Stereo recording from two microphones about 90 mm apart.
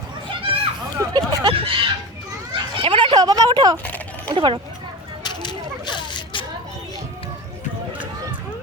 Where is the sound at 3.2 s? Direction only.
50° right (ahead or behind).